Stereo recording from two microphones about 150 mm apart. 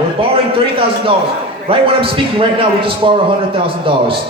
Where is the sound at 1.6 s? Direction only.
35° right (ahead or behind).